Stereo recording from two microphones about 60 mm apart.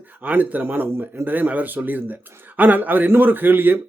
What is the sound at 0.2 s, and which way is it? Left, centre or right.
A man's voice, right.